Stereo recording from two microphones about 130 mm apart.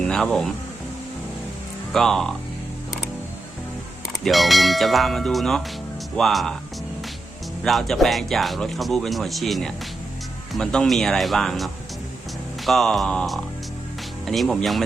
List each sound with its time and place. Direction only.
0.0 s speech: 5° left (ahead or behind)
1.9 s speech: 5° left (ahead or behind)
4.2 s speech: centre (ahead or behind)
7.6 s speech: centre (ahead or behind)